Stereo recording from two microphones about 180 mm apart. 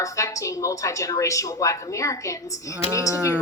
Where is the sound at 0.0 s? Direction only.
15° left (ahead or behind).